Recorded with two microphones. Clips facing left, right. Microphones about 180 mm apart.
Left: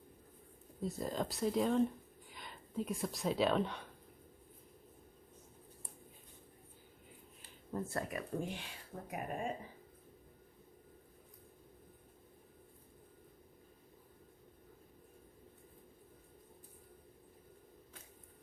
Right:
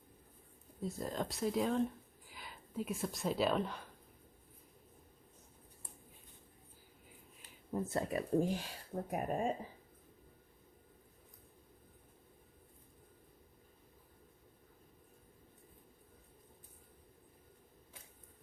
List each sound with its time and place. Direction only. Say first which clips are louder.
0.8 s speech: left 1 dB; centre (ahead or behind)
7.7 s speech: right 3 dB; 20° right (ahead or behind); by 9.5 s 40° right (ahead or behind)